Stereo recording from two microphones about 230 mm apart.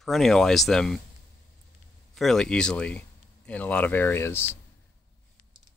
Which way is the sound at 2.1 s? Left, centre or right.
Centre.